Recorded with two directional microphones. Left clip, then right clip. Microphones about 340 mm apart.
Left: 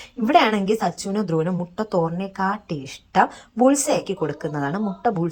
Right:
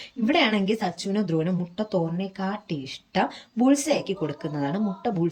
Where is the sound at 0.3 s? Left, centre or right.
Centre.